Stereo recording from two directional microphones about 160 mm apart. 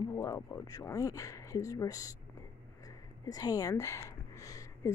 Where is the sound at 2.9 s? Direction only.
20° left (ahead or behind).